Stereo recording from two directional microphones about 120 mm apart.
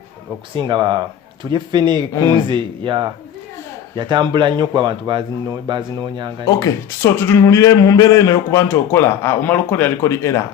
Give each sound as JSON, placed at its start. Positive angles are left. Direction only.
{"t": 0.5, "sound": "a man's voice", "side_deg": -40}
{"t": 6.4, "sound": "speech", "side_deg": 30}